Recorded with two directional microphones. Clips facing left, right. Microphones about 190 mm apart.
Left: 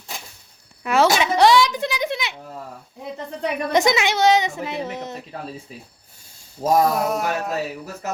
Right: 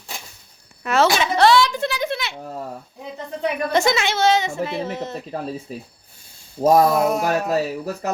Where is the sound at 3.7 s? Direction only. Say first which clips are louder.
Left 2 dB; 15° left (ahead or behind).